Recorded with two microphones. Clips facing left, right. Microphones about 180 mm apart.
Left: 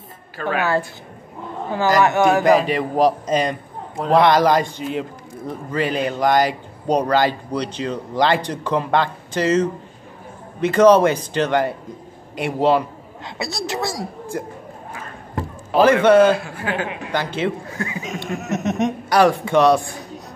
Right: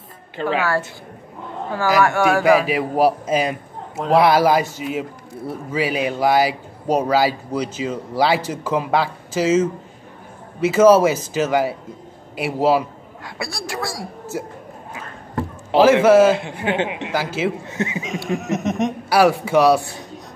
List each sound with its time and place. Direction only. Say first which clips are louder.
0.6 s a woman's voice: left 3 dB; 20° left (ahead or behind)
2.0 s a woman's voice: left 1 dB; 20° left (ahead or behind)
2.4 s a man's voice: even; 5° right (ahead or behind)
13.2 s a woman's voice: left 3 dB; 20° left (ahead or behind)
14.3 s a man's voice: even; 5° right (ahead or behind)
15.8 s a man's voice: right 1 dB; 5° right (ahead or behind)
16.3 s a man's voice: right 3 dB; 20° right (ahead or behind)
17.1 s a man's voice: left 4 dB; 5° right (ahead or behind)
17.6 s a sound: right 3 dB; 20° right (ahead or behind)
18.0 s a man's voice: right 3 dB; centre (ahead or behind)